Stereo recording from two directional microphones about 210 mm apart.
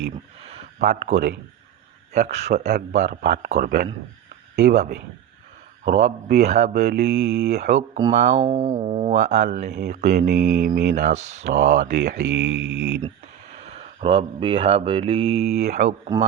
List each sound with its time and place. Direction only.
0.8 s a man's voice: 35° right (ahead or behind)
1.1 s speech: 55° right (ahead or behind)
2.1 s a man's voice: 35° right (ahead or behind)
4.6 s a man's voice: 35° right (ahead or behind)
6.9 s speech: 50° right (ahead or behind)
7.5 s a man's voice: 35° right (ahead or behind)
8.5 s a sound: 20° right (ahead or behind)
8.9 s a man's voice: 30° right (ahead or behind)
9.8 s speech: 50° right (ahead or behind)
10.9 s a man's voice: 35° right (ahead or behind)
11.9 s speech: 55° right (ahead or behind)
12.2 s mantra: 55° right (ahead or behind)
13.6 s mantra: 30° right (ahead or behind)